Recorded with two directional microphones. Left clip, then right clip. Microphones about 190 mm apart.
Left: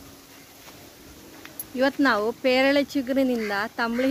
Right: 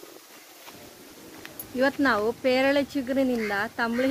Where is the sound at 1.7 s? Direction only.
65° left (ahead or behind).